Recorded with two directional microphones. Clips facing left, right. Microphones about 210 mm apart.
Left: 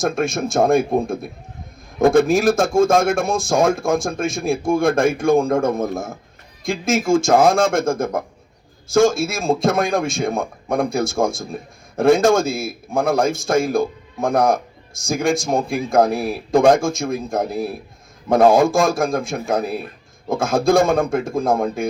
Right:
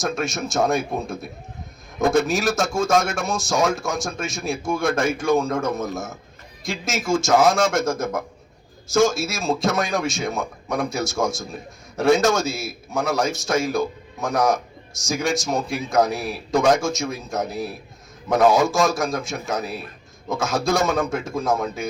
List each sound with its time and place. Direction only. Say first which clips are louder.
0.0 s a man's voice: left 5 dB; 55° left (ahead or behind)